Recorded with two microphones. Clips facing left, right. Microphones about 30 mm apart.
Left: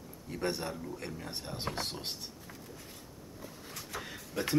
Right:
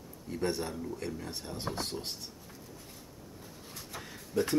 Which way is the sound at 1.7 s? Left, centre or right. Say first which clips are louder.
Right 1 dB; left.